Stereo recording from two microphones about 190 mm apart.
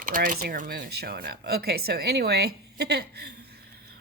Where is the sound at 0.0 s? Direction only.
45° right (ahead or behind).